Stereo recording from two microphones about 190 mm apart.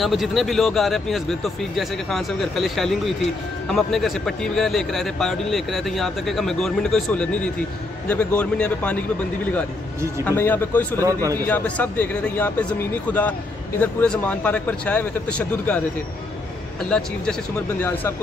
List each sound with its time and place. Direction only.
0.0 s a man's voice: centre (ahead or behind)
10.2 s speech: 10° left (ahead or behind)
11.0 s speech: 15° right (ahead or behind)
11.3 s speech: 10° left (ahead or behind)
13.7 s speech: 5° left (ahead or behind)
16.9 s a man's voice: 5° left (ahead or behind)